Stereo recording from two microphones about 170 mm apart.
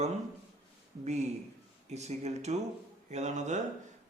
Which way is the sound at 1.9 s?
40° right (ahead or behind).